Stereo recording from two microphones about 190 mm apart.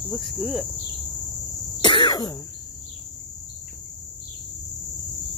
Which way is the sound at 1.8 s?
25° left (ahead or behind).